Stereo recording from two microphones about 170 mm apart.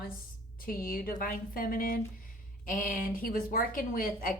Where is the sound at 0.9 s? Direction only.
60° left (ahead or behind).